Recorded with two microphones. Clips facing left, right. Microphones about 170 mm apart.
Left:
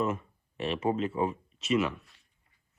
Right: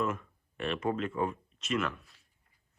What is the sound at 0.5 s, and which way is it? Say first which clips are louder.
Speech: left 3 dB; 5° left (ahead or behind).